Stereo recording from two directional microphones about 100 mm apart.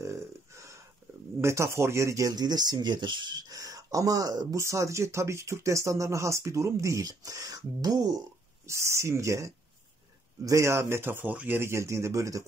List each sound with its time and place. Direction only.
0.0 s a sound: 30° right (ahead or behind)
1.4 s speech: 30° right (ahead or behind)
8.6 s speech: 30° right (ahead or behind)